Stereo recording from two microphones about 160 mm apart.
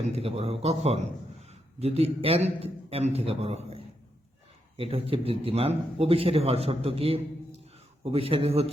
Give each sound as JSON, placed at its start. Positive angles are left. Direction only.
{"t": 0.1, "sound": "a man's voice", "side_deg": -35}